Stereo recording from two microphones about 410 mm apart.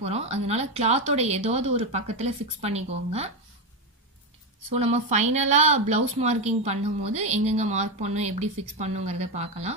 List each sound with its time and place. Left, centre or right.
0.0 s a woman's voice: centre
4.6 s a woman's voice: centre